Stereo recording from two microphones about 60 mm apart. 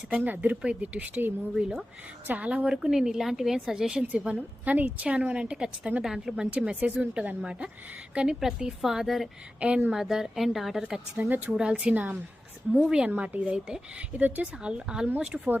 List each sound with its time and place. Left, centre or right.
0.1 s a woman's voice: right
1.5 s a woman's voice: centre
2.2 s a woman's voice: right
2.6 s a woman's voice: centre
6.0 s a woman's voice: centre
6.7 s a woman's voice: right; by 9.3 s centre
9.6 s a woman's voice: centre
9.9 s a woman's voice: centre
11.2 s speech: right
11.5 s a woman's voice: centre
14.2 s a woman's voice: right
14.6 s a woman's voice: centre